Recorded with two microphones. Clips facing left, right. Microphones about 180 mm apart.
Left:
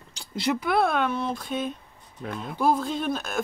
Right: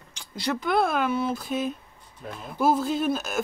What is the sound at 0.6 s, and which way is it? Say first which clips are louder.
Speech: right 1 dB; 5° left (ahead or behind).